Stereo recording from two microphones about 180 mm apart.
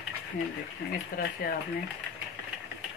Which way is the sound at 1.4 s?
55° left (ahead or behind).